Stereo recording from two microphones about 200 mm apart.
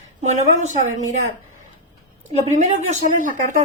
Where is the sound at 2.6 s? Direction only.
40° right (ahead or behind).